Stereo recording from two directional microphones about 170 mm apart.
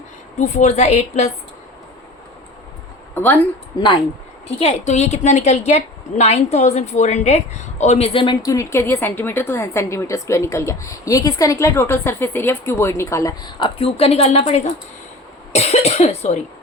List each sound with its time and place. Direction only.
0.3 s a woman's voice: 45° left (ahead or behind)
3.2 s a woman's voice: 10° left (ahead or behind)
4.6 s a woman's voice: 40° left (ahead or behind)